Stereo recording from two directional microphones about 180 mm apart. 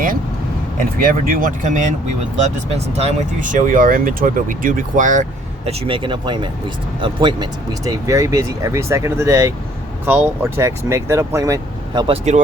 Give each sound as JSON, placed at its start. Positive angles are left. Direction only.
{"t": 0.8, "sound": "speech", "side_deg": -50}
{"t": 3.4, "sound": "speech", "side_deg": -45}
{"t": 5.6, "sound": "speech", "side_deg": -30}
{"t": 12.0, "sound": "speech", "side_deg": -35}